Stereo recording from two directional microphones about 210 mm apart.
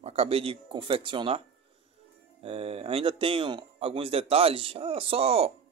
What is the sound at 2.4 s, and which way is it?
Speech, 30° right (ahead or behind).